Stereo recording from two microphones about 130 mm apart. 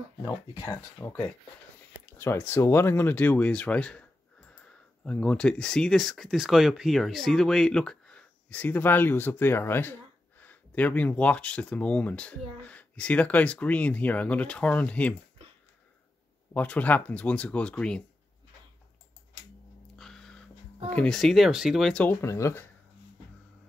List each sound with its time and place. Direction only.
0.2 s speech: 25° left (ahead or behind)
5.0 s speech: 10° left (ahead or behind)
16.5 s speech: 10° left (ahead or behind)
20.0 s music: 5° left (ahead or behind)
20.9 s speech: 5° left (ahead or behind)
22.2 s speech: 20° left (ahead or behind)